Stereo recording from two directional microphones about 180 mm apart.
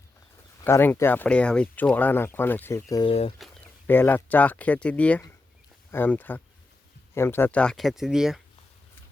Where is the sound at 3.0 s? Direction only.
30° left (ahead or behind).